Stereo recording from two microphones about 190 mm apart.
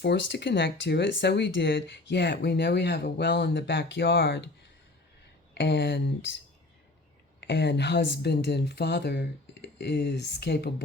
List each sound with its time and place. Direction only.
0.0 s speech: 65° left (ahead or behind)
5.5 s speech: 65° left (ahead or behind)
7.4 s speech: 65° left (ahead or behind)